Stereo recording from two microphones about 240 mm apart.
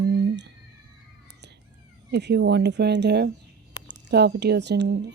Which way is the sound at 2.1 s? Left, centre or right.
Right.